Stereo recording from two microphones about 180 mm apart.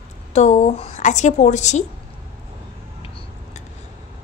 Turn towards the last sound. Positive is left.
turn(degrees=30)  # may be behind; listen again after turning